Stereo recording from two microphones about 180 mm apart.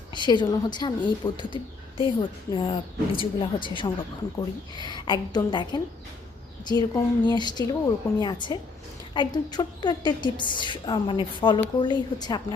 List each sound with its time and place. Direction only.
0.1 s a woman's voice: 25° left (ahead or behind)